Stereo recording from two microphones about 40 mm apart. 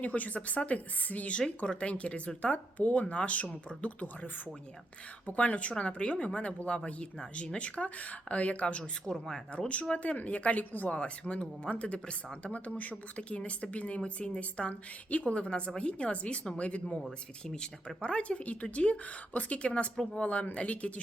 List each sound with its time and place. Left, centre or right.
0.0 s speech: left
1.4 s speech: left
1.9 s speech: left
8.8 s speech: centre
9.5 s speech: left
10.9 s speech: left
17.1 s speech: centre; by 21.0 s left